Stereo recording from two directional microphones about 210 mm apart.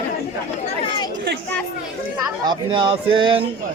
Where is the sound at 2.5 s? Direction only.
25° right (ahead or behind).